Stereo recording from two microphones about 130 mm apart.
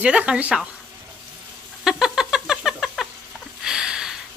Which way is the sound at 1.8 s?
5° right (ahead or behind).